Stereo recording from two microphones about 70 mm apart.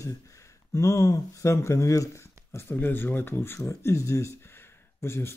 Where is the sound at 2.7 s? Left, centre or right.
Left.